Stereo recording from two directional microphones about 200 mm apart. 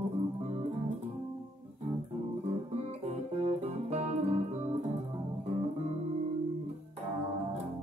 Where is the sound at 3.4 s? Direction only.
30° right (ahead or behind).